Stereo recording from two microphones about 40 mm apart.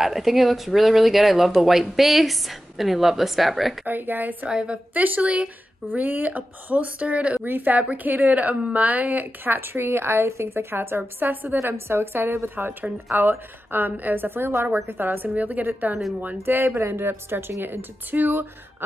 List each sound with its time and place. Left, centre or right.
0.0 s speech: centre
3.8 s a woman's voice: right
4.5 s a woman's voice: right
4.9 s a woman's voice: right
7.4 s a woman's voice: right
11.1 s a woman's voice: right
12.5 s a woman's voice: right
16.4 s a woman's voice: right